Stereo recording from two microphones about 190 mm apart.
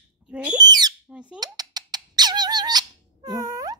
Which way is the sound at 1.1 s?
5° right (ahead or behind).